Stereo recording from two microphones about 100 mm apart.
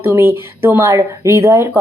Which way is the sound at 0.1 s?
25° right (ahead or behind).